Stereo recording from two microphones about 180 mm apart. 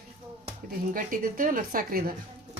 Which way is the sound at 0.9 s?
50° right (ahead or behind).